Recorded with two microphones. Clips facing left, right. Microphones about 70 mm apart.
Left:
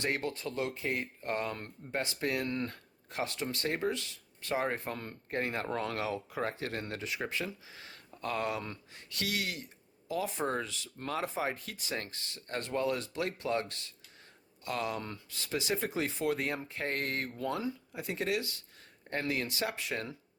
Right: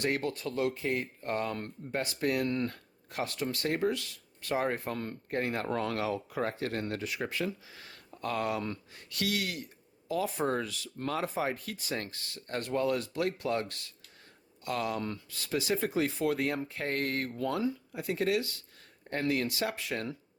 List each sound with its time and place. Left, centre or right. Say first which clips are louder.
0.0 s speech: right 3 dB; left